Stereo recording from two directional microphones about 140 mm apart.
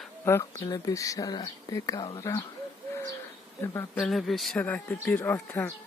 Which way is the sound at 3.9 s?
5° left (ahead or behind).